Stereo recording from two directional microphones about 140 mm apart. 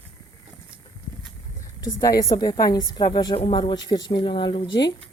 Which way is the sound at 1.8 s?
25° left (ahead or behind).